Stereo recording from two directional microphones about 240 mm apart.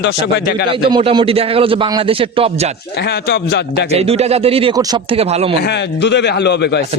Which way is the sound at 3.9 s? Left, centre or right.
Right.